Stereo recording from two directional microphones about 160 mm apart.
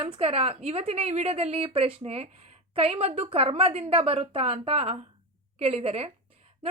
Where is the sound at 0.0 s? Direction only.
35° right (ahead or behind).